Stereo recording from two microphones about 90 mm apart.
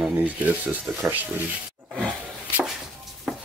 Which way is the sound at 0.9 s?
20° right (ahead or behind).